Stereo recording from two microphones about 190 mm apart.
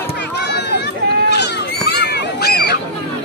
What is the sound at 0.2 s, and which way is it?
Run, 60° left (ahead or behind).